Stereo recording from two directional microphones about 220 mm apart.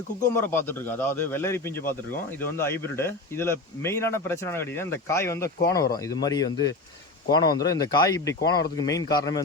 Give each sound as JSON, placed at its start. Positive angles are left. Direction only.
{"t": 0.2, "sound": "speech", "side_deg": 10}